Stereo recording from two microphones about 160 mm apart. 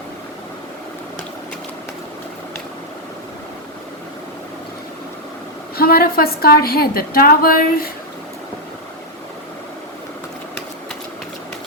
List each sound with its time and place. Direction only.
5.7 s a woman's voice: 70° left (ahead or behind)